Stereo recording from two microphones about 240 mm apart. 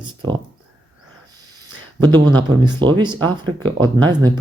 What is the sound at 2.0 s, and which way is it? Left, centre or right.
Speech, centre.